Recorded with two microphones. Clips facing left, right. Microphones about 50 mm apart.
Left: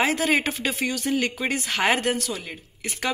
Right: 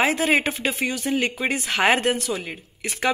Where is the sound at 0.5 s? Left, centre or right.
Centre.